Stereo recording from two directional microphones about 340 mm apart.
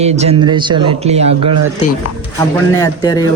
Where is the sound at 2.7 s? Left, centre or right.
Centre.